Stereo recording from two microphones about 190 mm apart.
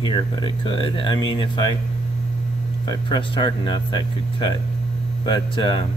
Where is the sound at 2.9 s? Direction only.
25° left (ahead or behind).